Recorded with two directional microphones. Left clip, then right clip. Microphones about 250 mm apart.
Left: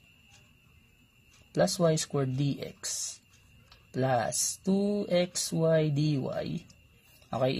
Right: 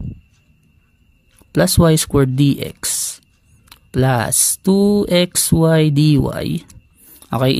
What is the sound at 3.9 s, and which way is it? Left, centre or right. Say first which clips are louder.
Speech: right 10 dB; right.